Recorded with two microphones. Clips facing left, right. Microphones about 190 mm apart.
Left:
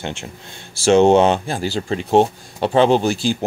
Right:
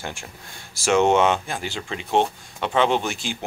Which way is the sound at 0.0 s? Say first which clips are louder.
Left 6 dB; 20° left (ahead or behind).